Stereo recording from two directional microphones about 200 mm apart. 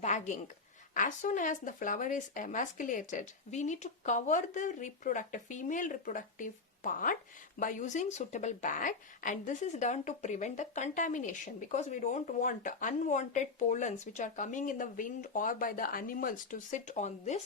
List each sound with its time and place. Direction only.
0.0 s a woman's voice: 35° left (ahead or behind)